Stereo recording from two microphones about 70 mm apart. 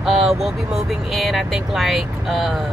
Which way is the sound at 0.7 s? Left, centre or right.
Centre.